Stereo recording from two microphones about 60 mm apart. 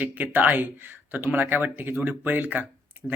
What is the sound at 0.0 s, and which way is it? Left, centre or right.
Speech, right.